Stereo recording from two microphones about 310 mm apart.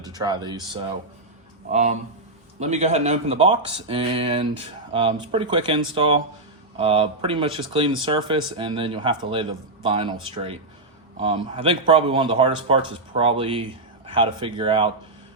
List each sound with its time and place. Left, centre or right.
0.0 s speech: centre